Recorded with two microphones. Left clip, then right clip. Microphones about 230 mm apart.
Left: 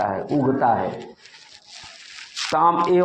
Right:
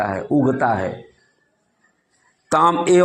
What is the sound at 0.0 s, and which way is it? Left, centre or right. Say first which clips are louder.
Speech: right 2 dB; right.